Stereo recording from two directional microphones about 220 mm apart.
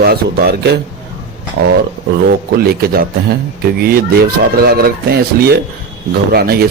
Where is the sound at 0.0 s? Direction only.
45° right (ahead or behind).